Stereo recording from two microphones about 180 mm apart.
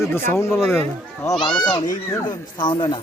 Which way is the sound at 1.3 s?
25° left (ahead or behind).